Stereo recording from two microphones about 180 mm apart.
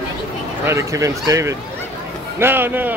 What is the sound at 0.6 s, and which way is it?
A man's voice, 15° right (ahead or behind).